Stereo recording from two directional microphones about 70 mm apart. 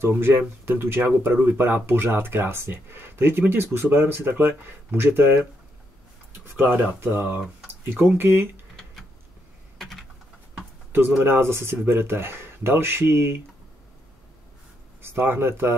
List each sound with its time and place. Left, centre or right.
0.0 s speech: right
9.8 s typing: centre
10.9 s speech: right
15.0 s speech: right